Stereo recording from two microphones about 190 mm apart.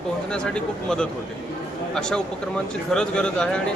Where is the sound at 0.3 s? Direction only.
5° left (ahead or behind).